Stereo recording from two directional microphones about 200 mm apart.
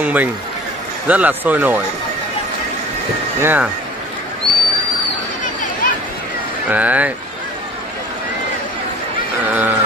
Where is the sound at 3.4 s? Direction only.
10° right (ahead or behind).